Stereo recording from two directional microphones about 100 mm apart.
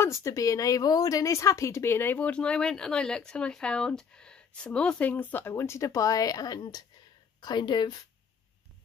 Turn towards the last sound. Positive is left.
turn(degrees=45)  # may be behind; listen again after turning